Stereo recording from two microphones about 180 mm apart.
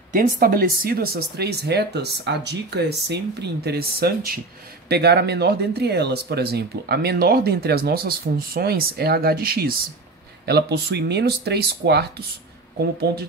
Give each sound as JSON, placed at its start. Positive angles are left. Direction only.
{"t": 0.1, "sound": "speech", "side_deg": -55}